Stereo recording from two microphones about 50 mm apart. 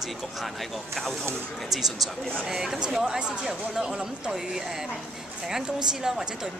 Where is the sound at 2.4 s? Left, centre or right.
Centre.